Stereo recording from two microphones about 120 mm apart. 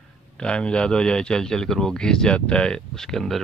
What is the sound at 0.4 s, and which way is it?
A man's voice, 5° left (ahead or behind).